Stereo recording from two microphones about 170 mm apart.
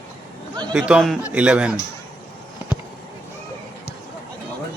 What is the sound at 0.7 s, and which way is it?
Speech, 5° right (ahead or behind).